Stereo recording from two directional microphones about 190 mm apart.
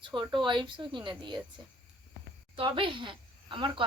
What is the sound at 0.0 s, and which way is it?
Speech, 25° right (ahead or behind).